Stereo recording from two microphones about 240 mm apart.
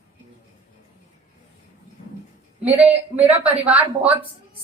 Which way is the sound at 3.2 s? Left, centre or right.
Centre.